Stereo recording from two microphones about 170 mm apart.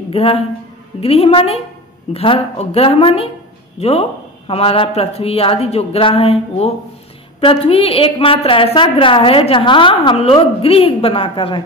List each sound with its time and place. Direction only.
0.1 s a woman's voice: 35° left (ahead or behind)
4.5 s a woman's voice: 35° left (ahead or behind)